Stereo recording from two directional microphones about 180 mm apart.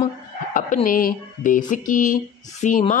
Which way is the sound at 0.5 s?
45° left (ahead or behind).